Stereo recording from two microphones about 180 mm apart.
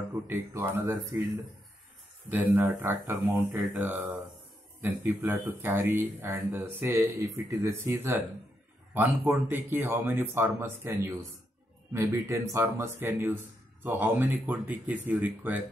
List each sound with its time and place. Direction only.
0.3 s speech: 15° right (ahead or behind)
2.2 s speech: 10° right (ahead or behind)